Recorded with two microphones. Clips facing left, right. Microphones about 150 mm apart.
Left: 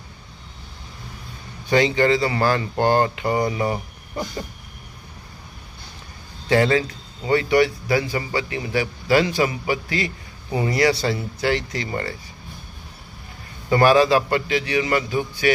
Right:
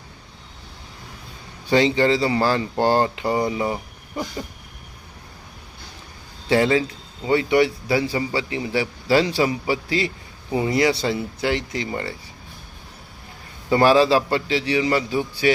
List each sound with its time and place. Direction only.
1.7 s a man's voice: 25° right (ahead or behind)
6.5 s a man's voice: 20° right (ahead or behind)
13.8 s a man's voice: 25° right (ahead or behind)